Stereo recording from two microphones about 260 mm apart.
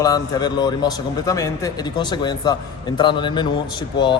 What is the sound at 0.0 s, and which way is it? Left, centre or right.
A man's voice, centre.